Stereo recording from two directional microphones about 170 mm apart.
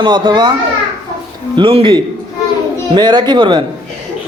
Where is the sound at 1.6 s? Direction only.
30° right (ahead or behind).